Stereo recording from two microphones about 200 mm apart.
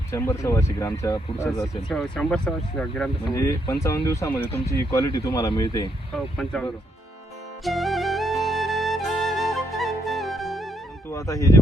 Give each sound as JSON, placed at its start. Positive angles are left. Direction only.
{"t": 0.1, "sound": "speech", "side_deg": 10}
{"t": 1.5, "sound": "speech", "side_deg": 0}
{"t": 3.3, "sound": "speech", "side_deg": 15}
{"t": 6.1, "sound": "speech", "side_deg": 0}
{"t": 7.6, "sound": "flute", "side_deg": 0}
{"t": 11.1, "sound": "speech", "side_deg": 15}